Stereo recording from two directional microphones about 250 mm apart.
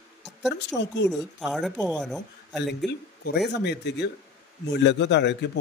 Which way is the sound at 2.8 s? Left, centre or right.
Left.